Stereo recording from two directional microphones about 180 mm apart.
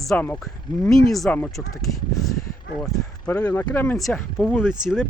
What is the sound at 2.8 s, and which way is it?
Speech, 5° left (ahead or behind).